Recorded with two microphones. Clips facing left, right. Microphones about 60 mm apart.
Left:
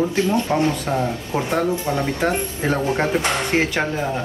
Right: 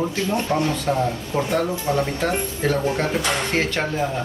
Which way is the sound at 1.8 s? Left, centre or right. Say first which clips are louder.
Left 1 dB; left.